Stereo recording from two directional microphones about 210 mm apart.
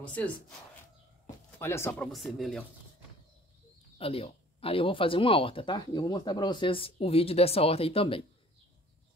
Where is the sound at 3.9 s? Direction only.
30° left (ahead or behind).